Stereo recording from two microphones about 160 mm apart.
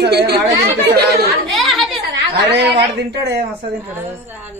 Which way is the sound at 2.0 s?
90° right.